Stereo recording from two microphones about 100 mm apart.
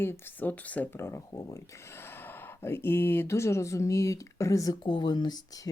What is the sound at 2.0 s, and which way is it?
Speech, 20° left (ahead or behind).